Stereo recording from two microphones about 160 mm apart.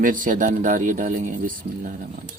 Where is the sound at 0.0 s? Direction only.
60° right (ahead or behind).